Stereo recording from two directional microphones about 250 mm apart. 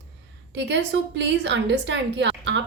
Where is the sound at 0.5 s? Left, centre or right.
Right.